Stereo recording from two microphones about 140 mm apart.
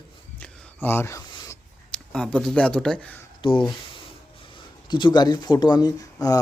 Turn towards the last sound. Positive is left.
turn(degrees=25)  # may be behind; listen again after turning